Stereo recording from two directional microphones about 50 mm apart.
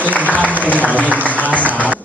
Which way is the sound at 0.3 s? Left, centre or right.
Left.